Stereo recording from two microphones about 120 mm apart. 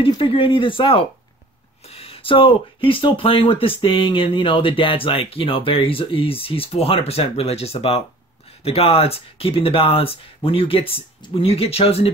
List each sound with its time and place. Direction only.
0.2 s speech: 50° left (ahead or behind)